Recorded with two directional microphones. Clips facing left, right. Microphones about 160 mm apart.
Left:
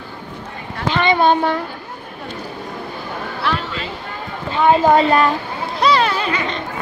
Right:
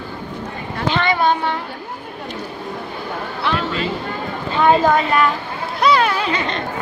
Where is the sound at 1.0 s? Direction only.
25° left (ahead or behind).